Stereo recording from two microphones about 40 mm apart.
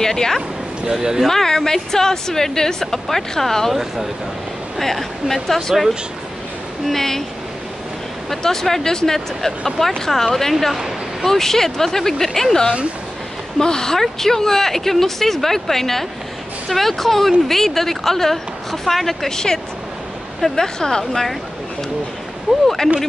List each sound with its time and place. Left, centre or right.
0.0 s a woman's voice: centre
0.9 s speech: centre
1.2 s a woman's voice: centre
4.7 s speech: centre
6.9 s a woman's voice: centre
8.3 s a woman's voice: centre
22.5 s speech: centre